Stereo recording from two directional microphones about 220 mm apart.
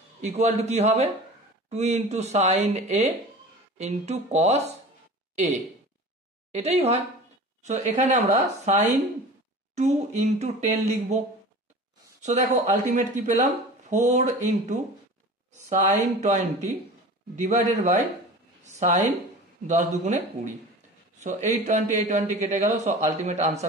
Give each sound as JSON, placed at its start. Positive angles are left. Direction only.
{"t": 0.2, "sound": "speech", "side_deg": -30}
{"t": 6.5, "sound": "a woman's voice", "side_deg": -30}
{"t": 12.2, "sound": "speech", "side_deg": -35}